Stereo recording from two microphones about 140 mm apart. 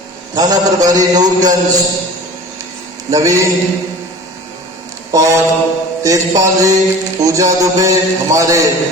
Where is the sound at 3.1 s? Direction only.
25° right (ahead or behind).